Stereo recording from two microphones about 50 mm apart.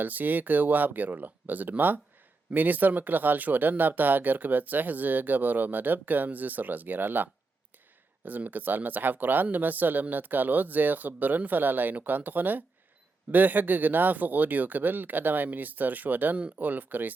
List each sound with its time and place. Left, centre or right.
0.0 s speech: right